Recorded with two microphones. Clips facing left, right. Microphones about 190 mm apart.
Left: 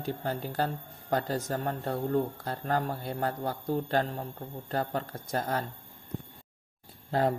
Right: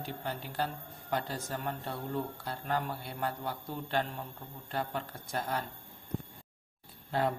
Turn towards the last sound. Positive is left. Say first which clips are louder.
# left 4 dB
turn(degrees=40)  # may be behind; listen again after turning